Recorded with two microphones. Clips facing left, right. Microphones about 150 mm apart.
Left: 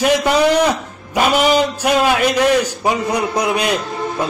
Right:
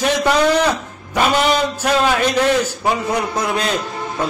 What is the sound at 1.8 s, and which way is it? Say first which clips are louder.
A man's voice: left 2 dB; 10° left (ahead or behind).